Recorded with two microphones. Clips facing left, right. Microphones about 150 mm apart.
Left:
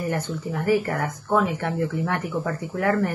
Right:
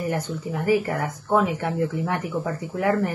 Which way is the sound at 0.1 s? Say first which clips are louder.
Even; 15° right (ahead or behind).